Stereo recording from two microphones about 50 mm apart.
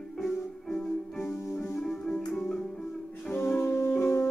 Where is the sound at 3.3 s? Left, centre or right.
Left.